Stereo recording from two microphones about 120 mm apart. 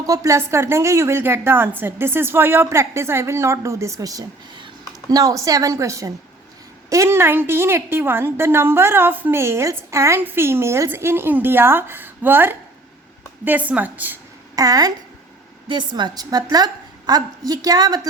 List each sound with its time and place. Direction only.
0.0 s a woman's voice: 30° right (ahead or behind)
14.5 s a woman's voice: 30° right (ahead or behind)